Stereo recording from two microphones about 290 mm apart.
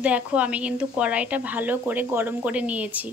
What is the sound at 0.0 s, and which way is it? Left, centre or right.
A woman's voice, centre.